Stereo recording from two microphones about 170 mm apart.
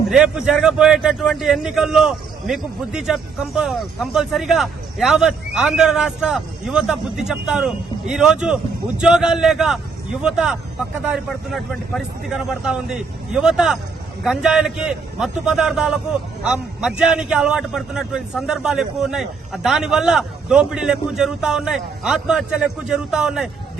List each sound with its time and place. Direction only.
0.1 s a man's voice: 5° right (ahead or behind)